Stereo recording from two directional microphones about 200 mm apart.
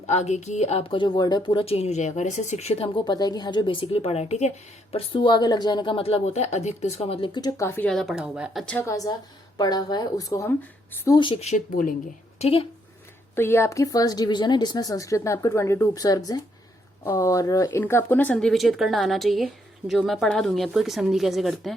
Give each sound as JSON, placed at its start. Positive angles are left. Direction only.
{"t": 0.1, "sound": "speech", "side_deg": 35}
{"t": 8.6, "sound": "speech", "side_deg": 10}
{"t": 12.4, "sound": "a woman's voice", "side_deg": 30}
{"t": 13.3, "sound": "speech", "side_deg": 10}